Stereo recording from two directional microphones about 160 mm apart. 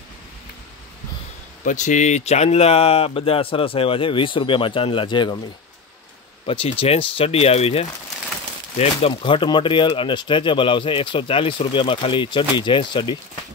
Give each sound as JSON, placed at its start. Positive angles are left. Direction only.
{"t": 1.6, "sound": "speech", "side_deg": 50}
{"t": 6.4, "sound": "speech", "side_deg": 35}